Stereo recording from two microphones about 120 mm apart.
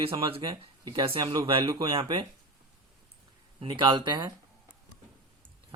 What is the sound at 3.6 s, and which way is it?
Speech, 45° right (ahead or behind).